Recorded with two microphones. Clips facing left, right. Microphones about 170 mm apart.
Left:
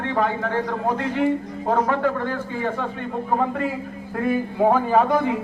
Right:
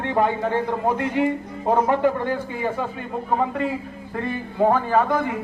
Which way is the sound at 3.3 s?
Centre (ahead or behind).